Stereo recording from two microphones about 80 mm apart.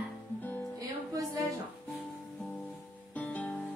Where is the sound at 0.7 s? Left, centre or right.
Right.